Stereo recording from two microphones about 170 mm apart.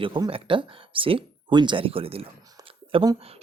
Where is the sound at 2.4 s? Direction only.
25° right (ahead or behind).